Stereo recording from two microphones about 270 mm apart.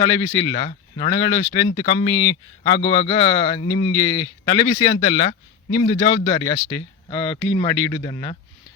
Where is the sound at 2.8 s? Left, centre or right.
Left.